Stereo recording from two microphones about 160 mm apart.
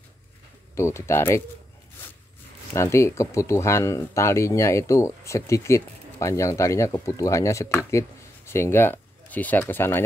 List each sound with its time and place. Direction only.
0.7 s speech: 15° left (ahead or behind)
2.7 s speech: 15° left (ahead or behind)